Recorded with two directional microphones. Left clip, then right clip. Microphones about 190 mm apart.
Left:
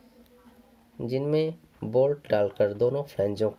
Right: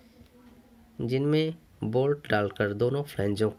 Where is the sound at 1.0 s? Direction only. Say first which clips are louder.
Left 1 dB; 35° right (ahead or behind).